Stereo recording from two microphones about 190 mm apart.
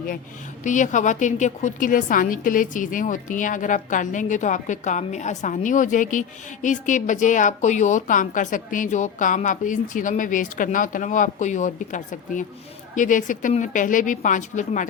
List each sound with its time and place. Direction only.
0.6 s a woman's voice: 40° left (ahead or behind)